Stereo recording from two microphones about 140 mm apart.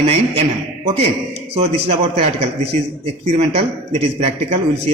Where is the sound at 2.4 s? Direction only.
45° right (ahead or behind).